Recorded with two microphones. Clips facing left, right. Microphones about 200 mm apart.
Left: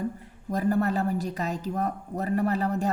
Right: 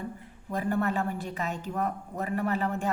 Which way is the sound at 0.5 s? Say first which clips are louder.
Left 3 dB; 40° left (ahead or behind).